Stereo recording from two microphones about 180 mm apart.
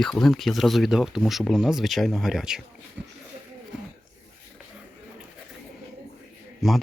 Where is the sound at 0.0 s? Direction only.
Centre (ahead or behind).